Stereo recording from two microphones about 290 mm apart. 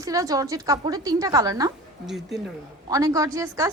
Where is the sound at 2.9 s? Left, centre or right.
Centre.